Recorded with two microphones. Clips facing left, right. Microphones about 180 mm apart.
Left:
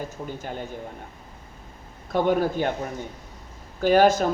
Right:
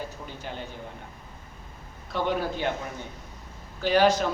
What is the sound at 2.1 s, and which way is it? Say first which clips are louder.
Speech: left 6 dB; 45° left (ahead or behind).